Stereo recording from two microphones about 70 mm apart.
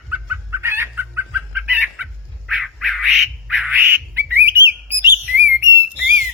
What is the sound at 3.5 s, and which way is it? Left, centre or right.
Squawk, centre.